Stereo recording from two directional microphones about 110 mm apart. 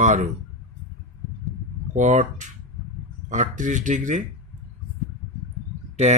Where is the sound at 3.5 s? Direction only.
90° right.